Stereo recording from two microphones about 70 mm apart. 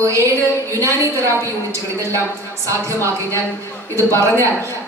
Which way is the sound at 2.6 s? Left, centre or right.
Right.